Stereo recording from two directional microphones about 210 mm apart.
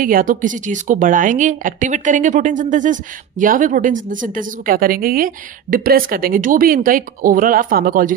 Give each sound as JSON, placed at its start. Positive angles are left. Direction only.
{"t": 0.0, "sound": "a woman's voice", "side_deg": -40}